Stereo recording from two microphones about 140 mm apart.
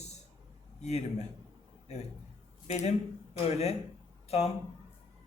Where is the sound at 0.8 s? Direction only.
50° left (ahead or behind).